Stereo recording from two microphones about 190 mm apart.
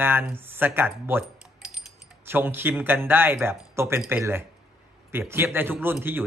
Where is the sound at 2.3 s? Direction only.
10° right (ahead or behind).